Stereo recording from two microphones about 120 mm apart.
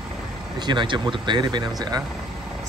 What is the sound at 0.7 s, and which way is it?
Speech, 40° right (ahead or behind).